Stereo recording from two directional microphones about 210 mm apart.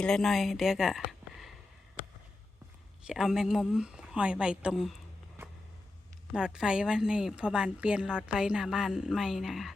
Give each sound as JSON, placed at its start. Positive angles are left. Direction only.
{"t": 0.0, "sound": "a woman's voice", "side_deg": 0}
{"t": 3.1, "sound": "a woman's voice", "side_deg": 0}
{"t": 6.3, "sound": "a woman's voice", "side_deg": -5}